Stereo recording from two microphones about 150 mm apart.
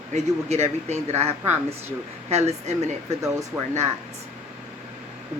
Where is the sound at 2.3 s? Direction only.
45° right (ahead or behind).